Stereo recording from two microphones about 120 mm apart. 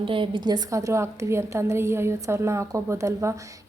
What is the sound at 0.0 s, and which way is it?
A woman's voice, 45° right (ahead or behind).